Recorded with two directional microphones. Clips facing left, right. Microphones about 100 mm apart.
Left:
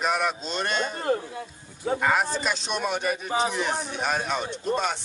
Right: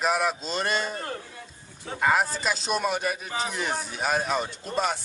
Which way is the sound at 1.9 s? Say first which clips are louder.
Right 2 dB; 5° right (ahead or behind).